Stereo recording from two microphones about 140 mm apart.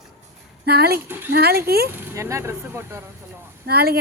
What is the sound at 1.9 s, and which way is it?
Speech, 20° right (ahead or behind).